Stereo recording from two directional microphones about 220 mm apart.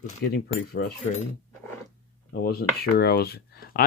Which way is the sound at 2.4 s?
45° left (ahead or behind).